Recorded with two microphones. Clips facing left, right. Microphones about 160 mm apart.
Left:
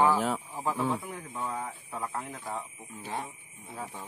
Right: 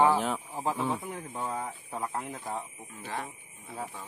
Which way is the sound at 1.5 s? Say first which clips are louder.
Right 1 dB; 25° right (ahead or behind).